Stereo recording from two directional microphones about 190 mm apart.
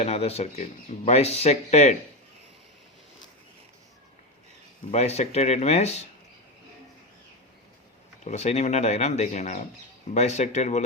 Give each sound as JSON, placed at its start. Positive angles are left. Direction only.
{"t": 0.0, "sound": "speech", "side_deg": 35}
{"t": 4.9, "sound": "speech", "side_deg": 35}
{"t": 8.2, "sound": "speech", "side_deg": 35}